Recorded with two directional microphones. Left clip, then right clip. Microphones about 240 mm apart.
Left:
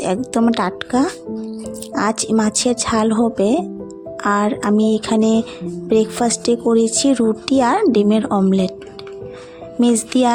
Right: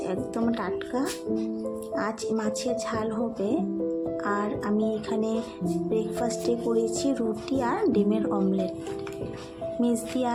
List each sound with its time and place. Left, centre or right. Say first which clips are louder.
0.0 s speech: left 10 dB; left
9.8 s speech: left 12 dB; left